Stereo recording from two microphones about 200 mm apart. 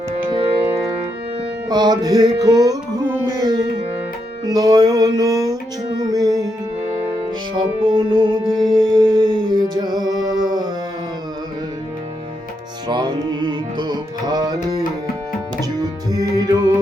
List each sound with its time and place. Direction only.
0.1 s music: 30° right (ahead or behind)
7.9 s music: 25° right (ahead or behind)
12.9 s music: 20° right (ahead or behind)
16.0 s music: 20° right (ahead or behind)